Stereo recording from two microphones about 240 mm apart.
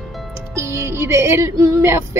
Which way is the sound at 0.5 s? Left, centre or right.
Centre.